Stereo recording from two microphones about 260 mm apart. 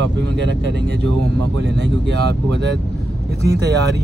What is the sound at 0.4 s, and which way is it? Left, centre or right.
Speech, right.